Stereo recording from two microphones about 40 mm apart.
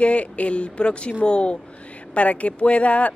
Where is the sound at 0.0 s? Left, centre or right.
Left.